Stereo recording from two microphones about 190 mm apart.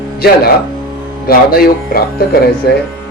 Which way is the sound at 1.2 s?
50° left (ahead or behind).